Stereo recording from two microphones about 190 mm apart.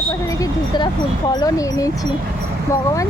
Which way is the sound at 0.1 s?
15° left (ahead or behind).